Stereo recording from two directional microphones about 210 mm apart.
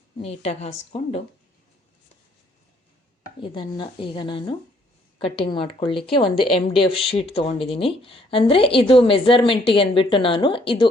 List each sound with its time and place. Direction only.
0.2 s a woman's voice: 30° left (ahead or behind)
3.4 s speech: 20° left (ahead or behind)